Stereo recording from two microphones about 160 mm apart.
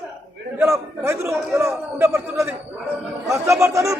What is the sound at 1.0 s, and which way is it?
A man's voice, 15° right (ahead or behind).